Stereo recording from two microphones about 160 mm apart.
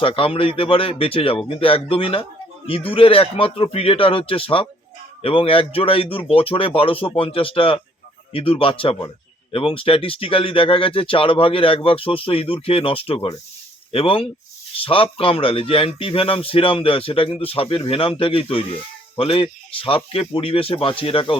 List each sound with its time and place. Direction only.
0.0 s speech: 35° left (ahead or behind)